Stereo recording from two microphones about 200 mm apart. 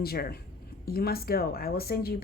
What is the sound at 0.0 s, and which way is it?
A woman's voice, 50° left (ahead or behind).